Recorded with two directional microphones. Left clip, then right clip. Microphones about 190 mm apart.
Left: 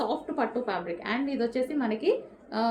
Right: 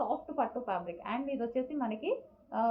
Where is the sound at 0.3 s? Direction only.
35° left (ahead or behind).